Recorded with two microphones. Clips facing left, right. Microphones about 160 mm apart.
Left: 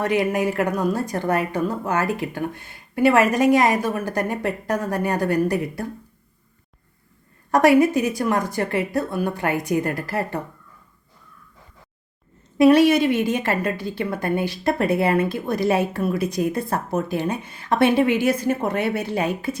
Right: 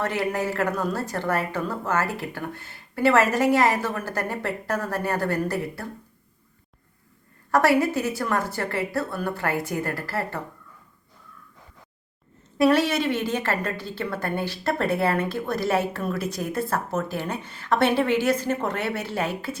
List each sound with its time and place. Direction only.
0.0 s a woman's voice: 15° left (ahead or behind)
7.5 s a woman's voice: 15° left (ahead or behind)
12.5 s a woman's voice: 15° left (ahead or behind)